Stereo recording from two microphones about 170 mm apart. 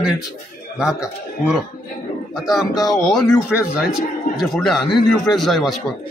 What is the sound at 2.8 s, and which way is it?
Speech, 20° left (ahead or behind).